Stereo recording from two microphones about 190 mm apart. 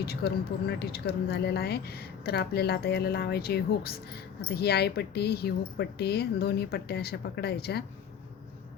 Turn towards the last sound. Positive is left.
turn(degrees=55)  # may be behind; listen again after turning